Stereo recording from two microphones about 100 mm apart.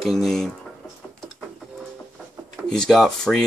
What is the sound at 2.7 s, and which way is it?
Speech, 5° left (ahead or behind).